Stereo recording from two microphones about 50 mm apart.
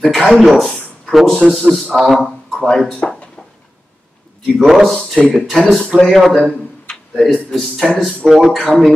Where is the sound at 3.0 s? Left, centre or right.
Left.